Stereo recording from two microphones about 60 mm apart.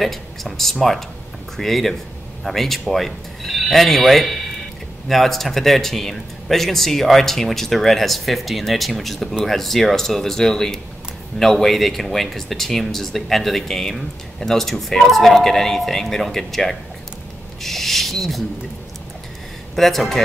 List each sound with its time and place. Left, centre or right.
0.0 s speech: centre
17.6 s a sound: centre
19.7 s speech: centre